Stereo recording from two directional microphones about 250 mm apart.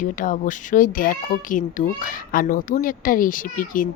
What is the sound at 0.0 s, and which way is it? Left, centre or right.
A woman's voice, left.